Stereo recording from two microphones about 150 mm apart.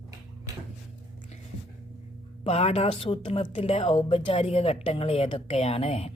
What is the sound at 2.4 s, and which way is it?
A woman's voice, 40° left (ahead or behind).